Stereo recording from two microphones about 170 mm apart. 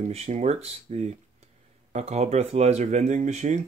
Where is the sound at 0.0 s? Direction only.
40° right (ahead or behind).